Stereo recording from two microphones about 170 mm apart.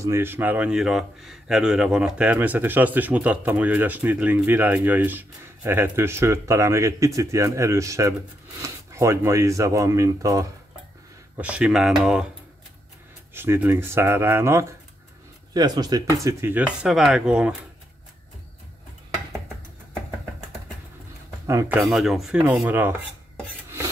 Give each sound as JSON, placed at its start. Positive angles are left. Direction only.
{"t": 0.0, "sound": "speech", "side_deg": -15}
{"t": 11.3, "sound": "speech", "side_deg": -5}
{"t": 13.3, "sound": "speech", "side_deg": -15}
{"t": 21.5, "sound": "speech", "side_deg": -15}
{"t": 21.8, "sound": "speech", "side_deg": 0}